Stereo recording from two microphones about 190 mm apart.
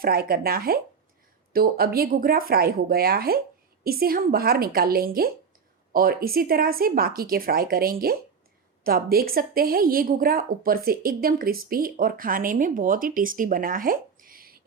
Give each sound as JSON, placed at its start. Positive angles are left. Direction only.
{"t": 0.0, "sound": "a woman's voice", "side_deg": -50}